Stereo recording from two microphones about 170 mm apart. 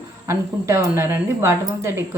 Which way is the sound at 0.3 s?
15° right (ahead or behind).